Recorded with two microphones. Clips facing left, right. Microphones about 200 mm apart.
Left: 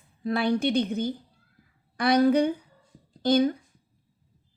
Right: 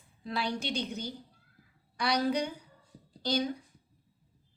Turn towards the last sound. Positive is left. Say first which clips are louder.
# left 9 dB
turn(degrees=55)  # may be behind; listen again after turning